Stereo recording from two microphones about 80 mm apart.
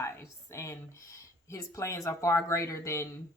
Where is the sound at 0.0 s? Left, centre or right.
Left.